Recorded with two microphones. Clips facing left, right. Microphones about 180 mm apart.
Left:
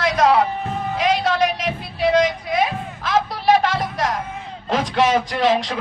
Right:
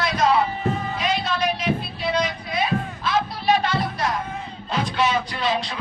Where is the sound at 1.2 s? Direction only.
90° left.